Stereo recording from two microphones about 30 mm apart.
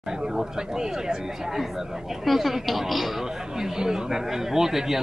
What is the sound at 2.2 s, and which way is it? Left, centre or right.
Speech, centre.